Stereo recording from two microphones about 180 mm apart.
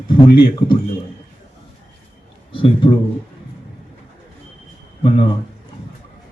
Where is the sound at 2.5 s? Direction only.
30° left (ahead or behind).